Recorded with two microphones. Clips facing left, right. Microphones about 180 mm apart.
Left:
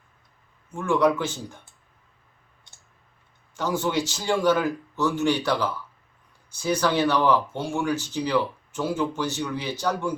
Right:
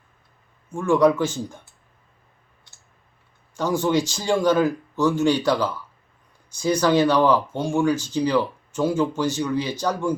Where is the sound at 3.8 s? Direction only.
10° right (ahead or behind).